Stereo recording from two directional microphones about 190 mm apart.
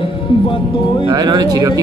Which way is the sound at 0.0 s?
25° left (ahead or behind).